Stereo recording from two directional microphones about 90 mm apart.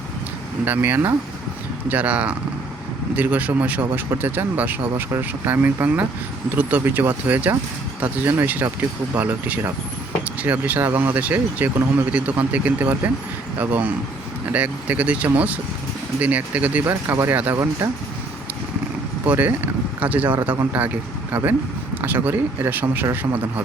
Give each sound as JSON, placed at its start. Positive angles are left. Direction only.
{"t": 0.6, "sound": "speech", "side_deg": -20}
{"t": 16.8, "sound": "speech", "side_deg": -30}
{"t": 17.5, "sound": "speech", "side_deg": -35}
{"t": 19.2, "sound": "speech", "side_deg": -20}